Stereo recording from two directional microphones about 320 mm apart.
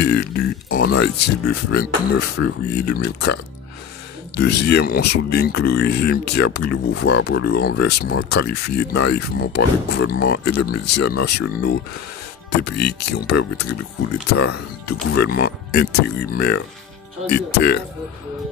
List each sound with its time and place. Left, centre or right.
0.0 s speech: left
4.4 s speech: left
15.3 s speech: left